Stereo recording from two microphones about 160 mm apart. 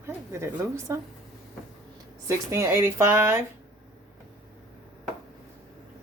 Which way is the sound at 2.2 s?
15° right (ahead or behind).